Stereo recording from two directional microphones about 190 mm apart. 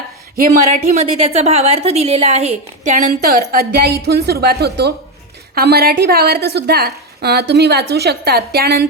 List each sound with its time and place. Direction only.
0.3 s a woman's voice: 45° right (ahead or behind)
3.5 s a woman's voice: 50° right (ahead or behind)